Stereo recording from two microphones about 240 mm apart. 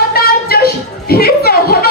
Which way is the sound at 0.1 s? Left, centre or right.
Left.